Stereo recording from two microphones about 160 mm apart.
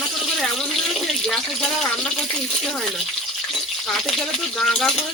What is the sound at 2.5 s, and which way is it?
Speech, centre (ahead or behind).